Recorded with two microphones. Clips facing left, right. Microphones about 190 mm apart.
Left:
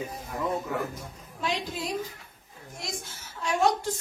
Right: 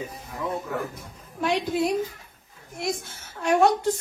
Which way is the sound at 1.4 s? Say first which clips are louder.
Right 8 dB; 60° right (ahead or behind).